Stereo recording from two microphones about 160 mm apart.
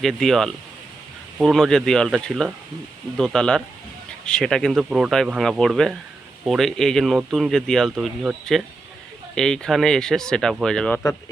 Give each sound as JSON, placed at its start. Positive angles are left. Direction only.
{"t": 0.0, "sound": "speech", "side_deg": 0}